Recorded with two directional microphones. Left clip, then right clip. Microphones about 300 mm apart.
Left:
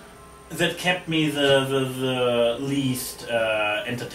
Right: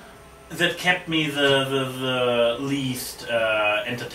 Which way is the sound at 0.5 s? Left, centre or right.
Centre.